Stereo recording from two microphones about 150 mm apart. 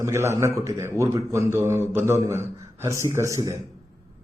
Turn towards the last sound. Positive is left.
turn(degrees=-20)  # may be behind; listen again after turning